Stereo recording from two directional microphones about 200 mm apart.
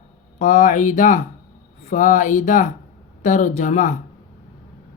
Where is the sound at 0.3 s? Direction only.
40° left (ahead or behind).